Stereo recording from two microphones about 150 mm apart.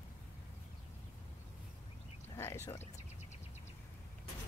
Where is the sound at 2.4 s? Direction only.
15° left (ahead or behind).